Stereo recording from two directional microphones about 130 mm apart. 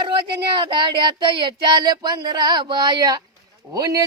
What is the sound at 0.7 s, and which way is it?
Child singing, 35° right (ahead or behind).